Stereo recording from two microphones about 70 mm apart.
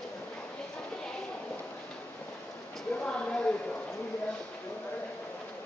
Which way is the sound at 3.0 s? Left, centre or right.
Centre.